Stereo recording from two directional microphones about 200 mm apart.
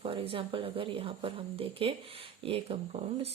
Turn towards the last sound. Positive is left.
turn(degrees=-30)  # may be behind; listen again after turning